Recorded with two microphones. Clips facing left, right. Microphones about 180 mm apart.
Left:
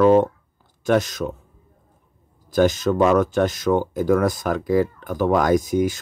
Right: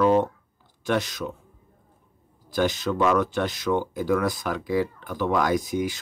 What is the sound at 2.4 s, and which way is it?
Speech, 45° left (ahead or behind).